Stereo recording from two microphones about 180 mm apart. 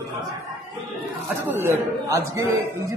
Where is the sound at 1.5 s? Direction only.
15° right (ahead or behind).